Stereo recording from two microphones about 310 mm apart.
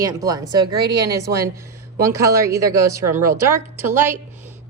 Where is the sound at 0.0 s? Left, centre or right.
Centre.